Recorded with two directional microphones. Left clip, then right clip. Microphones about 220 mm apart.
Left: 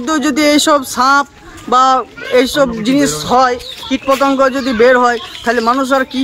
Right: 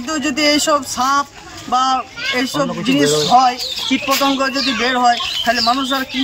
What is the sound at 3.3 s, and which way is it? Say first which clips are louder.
Speech: left 3 dB; 25° left (ahead or behind).